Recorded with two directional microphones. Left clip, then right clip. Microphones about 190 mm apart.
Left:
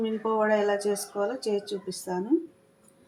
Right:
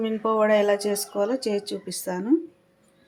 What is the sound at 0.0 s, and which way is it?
Speech, 60° right (ahead or behind).